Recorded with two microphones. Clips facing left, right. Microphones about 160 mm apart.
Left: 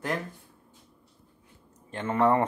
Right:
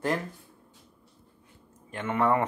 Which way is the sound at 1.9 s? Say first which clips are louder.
Left 2 dB; 30° left (ahead or behind).